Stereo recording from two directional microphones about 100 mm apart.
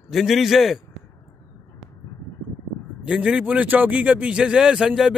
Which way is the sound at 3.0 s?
10° right (ahead or behind).